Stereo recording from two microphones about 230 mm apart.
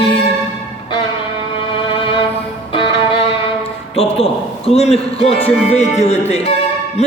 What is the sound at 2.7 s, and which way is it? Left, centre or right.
Music, left.